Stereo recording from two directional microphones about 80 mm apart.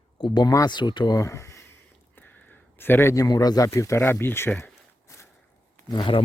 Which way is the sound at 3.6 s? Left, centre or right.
Left.